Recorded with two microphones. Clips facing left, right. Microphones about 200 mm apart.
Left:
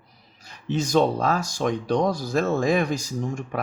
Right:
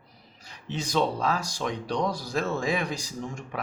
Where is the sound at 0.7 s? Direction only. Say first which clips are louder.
Left 6 dB; 45° left (ahead or behind).